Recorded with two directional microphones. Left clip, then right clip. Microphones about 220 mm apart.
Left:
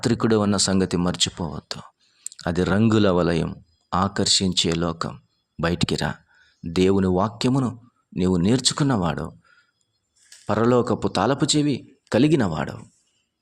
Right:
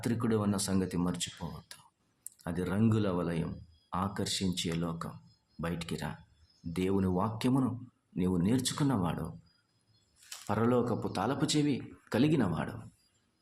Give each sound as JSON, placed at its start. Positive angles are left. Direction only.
{"t": 0.0, "sound": "speech", "side_deg": 40}
{"t": 10.4, "sound": "speech", "side_deg": 40}